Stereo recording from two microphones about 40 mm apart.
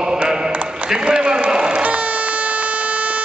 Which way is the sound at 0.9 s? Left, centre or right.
Right.